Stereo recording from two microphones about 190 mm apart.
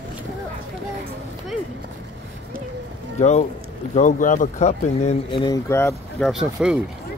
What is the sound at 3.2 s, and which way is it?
Speech, 35° left (ahead or behind).